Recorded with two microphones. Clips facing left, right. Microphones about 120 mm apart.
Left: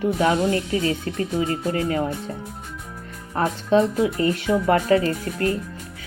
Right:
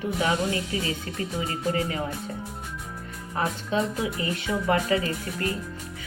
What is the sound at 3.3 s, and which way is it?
Speech, 40° left (ahead or behind).